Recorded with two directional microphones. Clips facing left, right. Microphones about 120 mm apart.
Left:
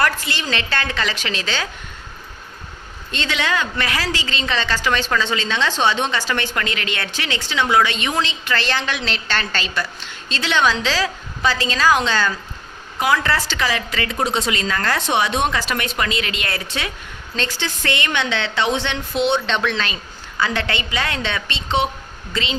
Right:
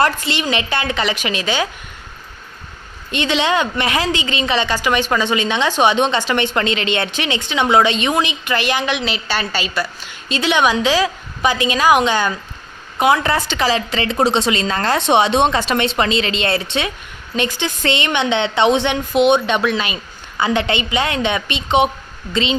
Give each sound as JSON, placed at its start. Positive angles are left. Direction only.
{"t": 0.0, "sound": "a woman's voice", "side_deg": -25}
{"t": 3.1, "sound": "a woman's voice", "side_deg": -20}